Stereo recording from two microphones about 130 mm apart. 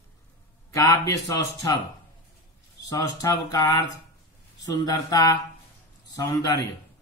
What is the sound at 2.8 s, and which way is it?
A man's voice, 30° left (ahead or behind).